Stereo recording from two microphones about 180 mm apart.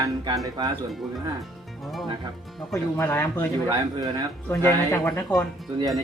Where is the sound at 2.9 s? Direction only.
15° left (ahead or behind).